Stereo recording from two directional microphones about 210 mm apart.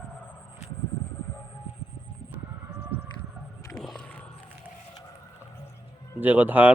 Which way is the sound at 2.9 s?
50° left (ahead or behind).